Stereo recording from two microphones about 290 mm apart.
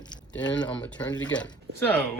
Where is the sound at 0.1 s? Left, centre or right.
Centre.